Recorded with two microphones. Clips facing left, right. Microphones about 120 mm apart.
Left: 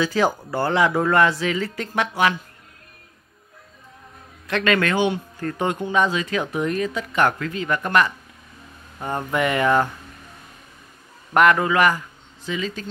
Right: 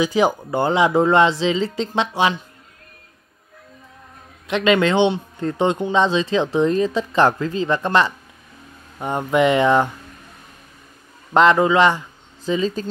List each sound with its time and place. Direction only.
0.0 s speech: 15° right (ahead or behind)
4.5 s speech: 20° right (ahead or behind)
11.3 s speech: 25° right (ahead or behind)
12.4 s speech: 35° right (ahead or behind)